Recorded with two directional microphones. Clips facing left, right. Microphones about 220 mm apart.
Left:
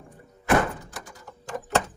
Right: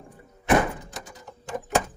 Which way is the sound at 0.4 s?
20° right (ahead or behind).